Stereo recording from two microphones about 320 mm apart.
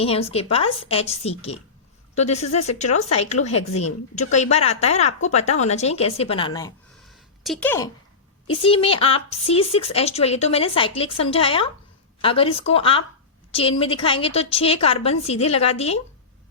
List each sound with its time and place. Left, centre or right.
0.0 s a woman's voice: centre
7.1 s a sound: centre
8.4 s speech: centre